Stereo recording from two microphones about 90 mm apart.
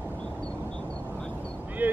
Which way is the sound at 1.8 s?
20° right (ahead or behind).